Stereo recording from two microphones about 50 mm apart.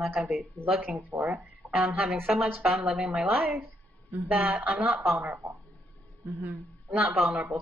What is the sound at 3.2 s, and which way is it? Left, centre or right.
Speech, right.